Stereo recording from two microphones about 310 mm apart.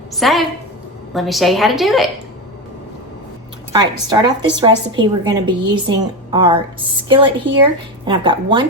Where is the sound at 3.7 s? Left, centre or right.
Centre.